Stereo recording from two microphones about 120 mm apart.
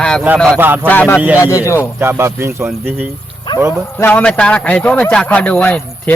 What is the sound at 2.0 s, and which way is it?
Speech, 20° right (ahead or behind).